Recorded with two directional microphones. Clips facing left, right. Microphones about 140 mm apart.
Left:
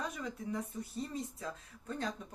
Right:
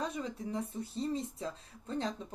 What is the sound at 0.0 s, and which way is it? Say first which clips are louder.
Speech: right 3 dB; 30° right (ahead or behind).